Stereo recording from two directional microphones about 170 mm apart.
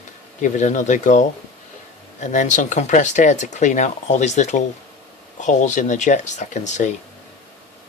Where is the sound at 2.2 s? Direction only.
45° left (ahead or behind).